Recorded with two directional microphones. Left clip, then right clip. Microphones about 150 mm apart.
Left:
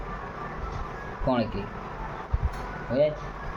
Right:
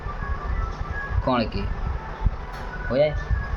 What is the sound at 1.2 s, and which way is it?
Speech, 25° right (ahead or behind).